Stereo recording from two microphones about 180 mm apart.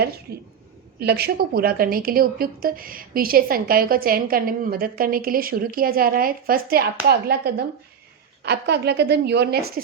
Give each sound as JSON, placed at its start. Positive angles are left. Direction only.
{"t": 0.9, "sound": "a woman's voice", "side_deg": -60}